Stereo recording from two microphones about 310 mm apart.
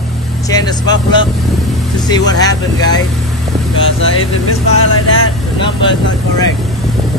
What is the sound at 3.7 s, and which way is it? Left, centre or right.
Speech, left.